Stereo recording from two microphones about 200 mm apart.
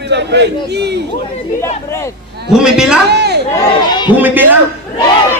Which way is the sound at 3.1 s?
55° right (ahead or behind).